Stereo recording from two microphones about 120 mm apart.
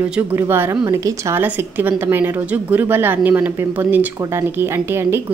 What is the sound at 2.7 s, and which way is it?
A woman's voice, 15° right (ahead or behind).